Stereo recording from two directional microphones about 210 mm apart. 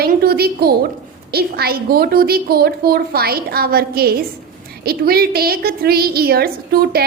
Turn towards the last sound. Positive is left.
turn(degrees=-45)  # may be behind; listen again after turning